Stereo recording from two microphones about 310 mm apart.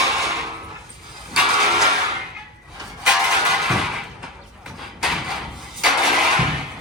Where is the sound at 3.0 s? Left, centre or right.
Centre.